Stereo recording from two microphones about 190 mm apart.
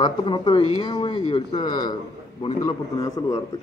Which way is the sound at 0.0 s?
25° left (ahead or behind).